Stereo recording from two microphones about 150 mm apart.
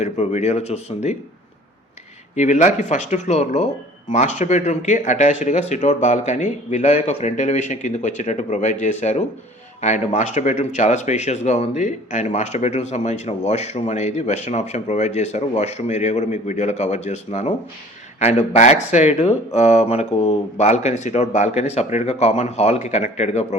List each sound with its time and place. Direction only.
0.0 s speech: 50° left (ahead or behind)
2.3 s speech: 50° left (ahead or behind)